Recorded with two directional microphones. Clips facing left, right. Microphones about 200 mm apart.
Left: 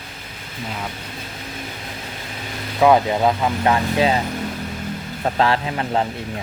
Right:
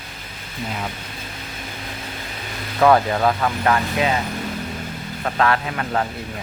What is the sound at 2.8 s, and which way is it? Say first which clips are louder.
Speech: left 1 dB; 15° left (ahead or behind).